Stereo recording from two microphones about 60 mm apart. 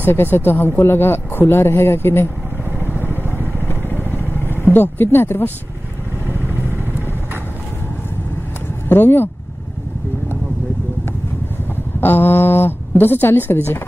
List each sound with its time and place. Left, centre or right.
0.0 s speech: left
2.8 s vehicle: right
3.6 s vehicle: left
4.7 s speech: left
6.2 s vehicle: right
8.8 s speech: left
12.0 s speech: left